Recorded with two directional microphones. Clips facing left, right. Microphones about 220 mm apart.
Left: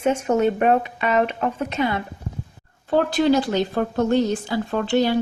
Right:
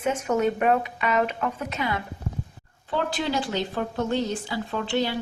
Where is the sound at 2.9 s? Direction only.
50° left (ahead or behind).